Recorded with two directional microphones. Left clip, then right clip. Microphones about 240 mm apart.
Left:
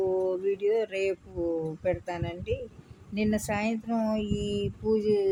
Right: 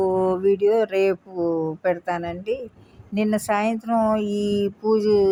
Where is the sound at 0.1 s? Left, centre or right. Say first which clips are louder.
Right 8 dB; centre.